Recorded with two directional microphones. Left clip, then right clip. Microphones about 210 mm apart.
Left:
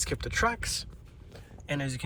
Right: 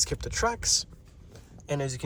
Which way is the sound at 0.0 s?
15° right (ahead or behind).